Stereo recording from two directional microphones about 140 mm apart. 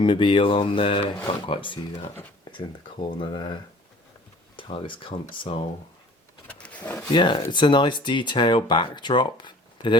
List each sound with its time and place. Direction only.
0.0 s speech: 35° left (ahead or behind)
6.5 s a sound: 10° left (ahead or behind)
7.0 s speech: 35° left (ahead or behind)